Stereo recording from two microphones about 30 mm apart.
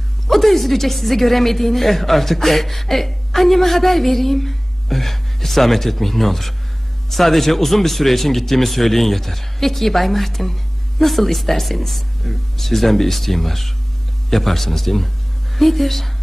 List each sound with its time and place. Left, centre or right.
0.3 s a woman's voice: centre